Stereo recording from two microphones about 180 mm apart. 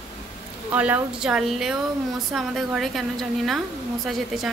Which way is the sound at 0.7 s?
10° right (ahead or behind).